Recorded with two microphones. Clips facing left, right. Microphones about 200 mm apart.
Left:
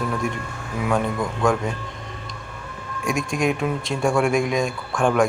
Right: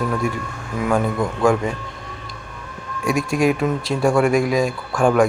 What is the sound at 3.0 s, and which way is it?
Speech, 5° right (ahead or behind).